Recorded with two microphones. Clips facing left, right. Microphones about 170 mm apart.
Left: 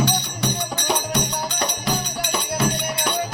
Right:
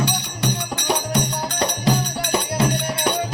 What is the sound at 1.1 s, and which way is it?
Music, 30° right (ahead or behind).